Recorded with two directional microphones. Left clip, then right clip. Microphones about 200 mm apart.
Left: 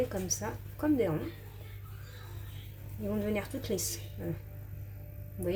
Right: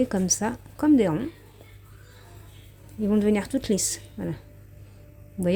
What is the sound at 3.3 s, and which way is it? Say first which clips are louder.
Speech: right 8 dB; 55° right (ahead or behind).